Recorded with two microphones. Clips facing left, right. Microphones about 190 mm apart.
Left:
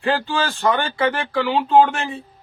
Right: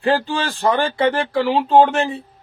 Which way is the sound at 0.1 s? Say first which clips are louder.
Right 2 dB; 35° right (ahead or behind).